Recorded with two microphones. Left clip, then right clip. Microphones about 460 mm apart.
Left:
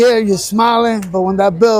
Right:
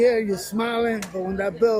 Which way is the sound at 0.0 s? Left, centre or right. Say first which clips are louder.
Left 8 dB; left.